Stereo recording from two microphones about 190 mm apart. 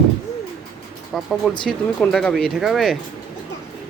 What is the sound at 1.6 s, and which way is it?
Speech, 5° left (ahead or behind).